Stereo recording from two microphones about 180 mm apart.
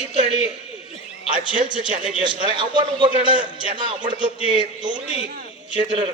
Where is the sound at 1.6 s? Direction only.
40° right (ahead or behind).